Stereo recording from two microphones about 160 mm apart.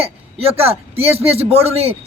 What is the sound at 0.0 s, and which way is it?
Speech, 40° right (ahead or behind).